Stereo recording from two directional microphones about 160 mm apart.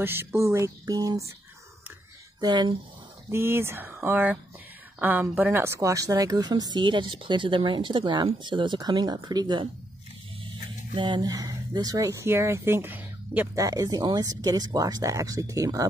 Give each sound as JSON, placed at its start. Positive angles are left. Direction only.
{"t": 0.0, "sound": "speech", "side_deg": -15}
{"t": 2.4, "sound": "speech", "side_deg": -25}
{"t": 3.3, "sound": "speech", "side_deg": -15}
{"t": 11.0, "sound": "speech", "side_deg": -25}
{"t": 13.7, "sound": "speech", "side_deg": -25}